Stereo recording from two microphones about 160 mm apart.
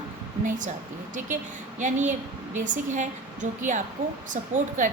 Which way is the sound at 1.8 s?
50° right (ahead or behind).